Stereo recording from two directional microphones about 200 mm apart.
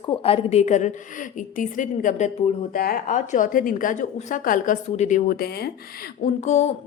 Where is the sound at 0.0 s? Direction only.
25° left (ahead or behind).